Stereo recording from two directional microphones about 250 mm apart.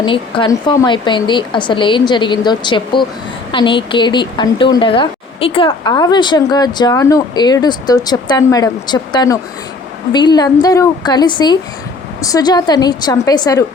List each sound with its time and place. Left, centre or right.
0.0 s speech: centre